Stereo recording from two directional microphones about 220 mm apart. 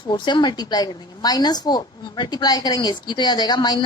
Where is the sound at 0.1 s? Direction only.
20° left (ahead or behind).